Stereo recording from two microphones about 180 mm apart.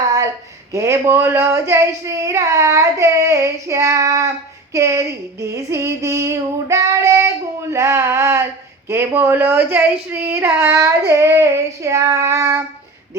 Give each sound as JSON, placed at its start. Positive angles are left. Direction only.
{"t": 0.7, "sound": "child singing", "side_deg": -15}